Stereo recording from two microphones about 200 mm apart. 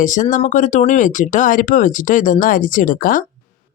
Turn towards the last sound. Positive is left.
turn(degrees=45)  # may be behind; listen again after turning